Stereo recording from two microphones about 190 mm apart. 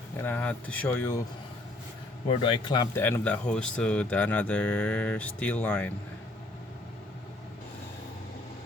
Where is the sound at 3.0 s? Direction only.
10° left (ahead or behind).